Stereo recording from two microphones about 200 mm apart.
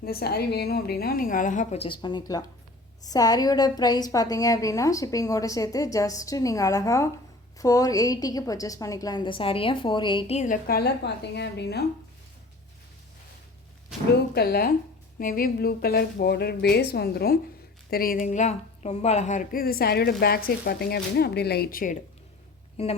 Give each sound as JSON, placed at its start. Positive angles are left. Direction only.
{"t": 0.0, "sound": "a woman's voice", "side_deg": 50}
{"t": 14.3, "sound": "speech", "side_deg": 50}